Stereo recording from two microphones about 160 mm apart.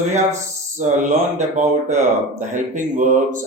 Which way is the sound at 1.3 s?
45° right (ahead or behind).